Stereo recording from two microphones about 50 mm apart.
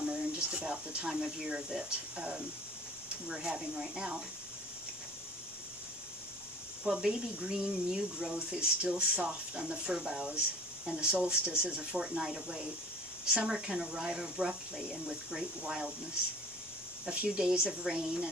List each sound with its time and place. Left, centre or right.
0.0 s speech: centre
6.8 s speech: centre
9.8 s speech: centre
17.0 s speech: right